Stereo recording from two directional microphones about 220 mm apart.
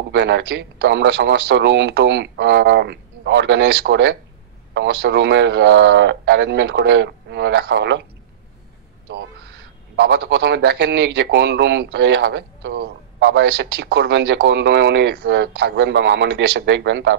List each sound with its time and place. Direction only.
0.1 s a man's voice: 50° right (ahead or behind)
9.1 s a man's voice: 45° right (ahead or behind)